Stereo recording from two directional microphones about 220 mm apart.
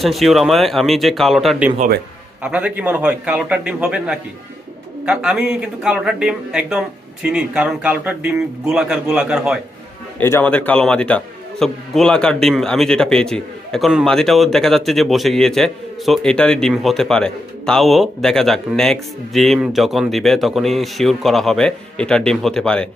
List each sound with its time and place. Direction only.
0.0 s a man's voice: centre (ahead or behind)
10.2 s a man's voice: 10° left (ahead or behind)